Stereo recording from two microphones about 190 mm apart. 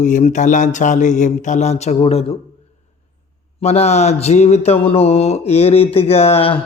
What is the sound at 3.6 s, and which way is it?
Mantra, 35° left (ahead or behind).